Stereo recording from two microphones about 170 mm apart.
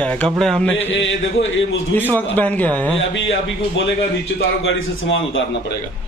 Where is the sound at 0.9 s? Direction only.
90° left.